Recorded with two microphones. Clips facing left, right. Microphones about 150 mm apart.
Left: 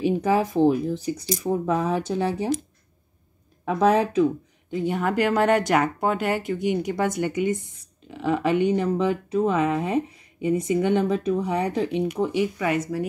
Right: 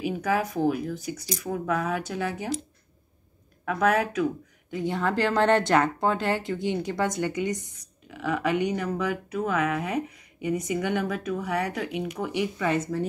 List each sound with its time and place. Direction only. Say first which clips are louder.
0.0 s speech: left 5 dB; 30° left (ahead or behind)
3.6 s speech: left 4 dB; 30° left (ahead or behind)
12.5 s speech: left 2 dB; 15° left (ahead or behind)